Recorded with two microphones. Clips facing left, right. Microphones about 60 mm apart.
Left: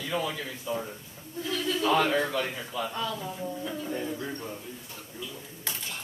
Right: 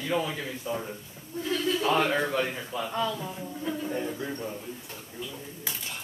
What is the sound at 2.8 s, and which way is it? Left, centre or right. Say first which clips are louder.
Speech: right 2 dB; centre.